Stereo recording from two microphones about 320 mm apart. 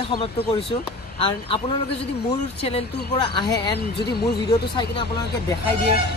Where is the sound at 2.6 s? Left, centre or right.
Centre.